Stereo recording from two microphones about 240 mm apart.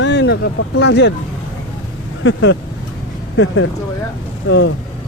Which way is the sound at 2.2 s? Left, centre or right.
Left.